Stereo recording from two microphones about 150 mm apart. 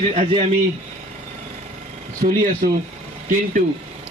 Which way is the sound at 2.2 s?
70° right (ahead or behind).